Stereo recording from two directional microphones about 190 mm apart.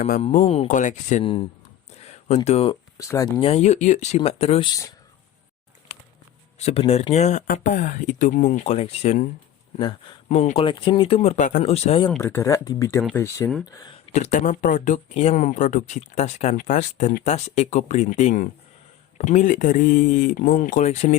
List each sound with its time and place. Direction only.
0.2 s speech: 30° left (ahead or behind)
1.2 s speech: 30° left (ahead or behind)
2.0 s a sound: 35° left (ahead or behind)
3.0 s speech: 15° left (ahead or behind)
3.4 s speech: 35° left (ahead or behind)
6.6 s speech: 30° left (ahead or behind)
12.2 s speech: 15° left (ahead or behind)
14.1 s speech: 40° left (ahead or behind)